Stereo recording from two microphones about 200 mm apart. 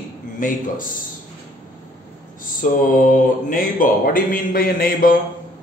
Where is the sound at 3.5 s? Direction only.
45° left (ahead or behind).